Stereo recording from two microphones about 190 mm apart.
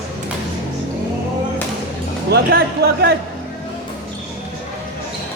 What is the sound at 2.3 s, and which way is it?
Speech, 55° right (ahead or behind).